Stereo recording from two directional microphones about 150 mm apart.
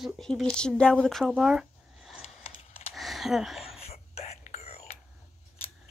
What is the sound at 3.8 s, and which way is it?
Whispering, 45° left (ahead or behind).